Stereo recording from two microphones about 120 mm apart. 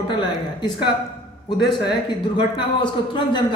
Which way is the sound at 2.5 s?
40° left (ahead or behind).